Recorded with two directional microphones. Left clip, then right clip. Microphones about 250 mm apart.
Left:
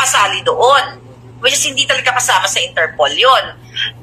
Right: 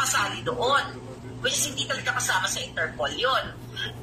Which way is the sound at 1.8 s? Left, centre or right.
Left.